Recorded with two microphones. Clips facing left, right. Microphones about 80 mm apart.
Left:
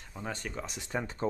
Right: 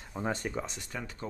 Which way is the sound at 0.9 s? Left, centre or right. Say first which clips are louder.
Left 10 dB; left.